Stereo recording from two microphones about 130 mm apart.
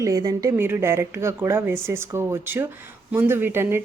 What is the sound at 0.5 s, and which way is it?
Speech, 15° right (ahead or behind).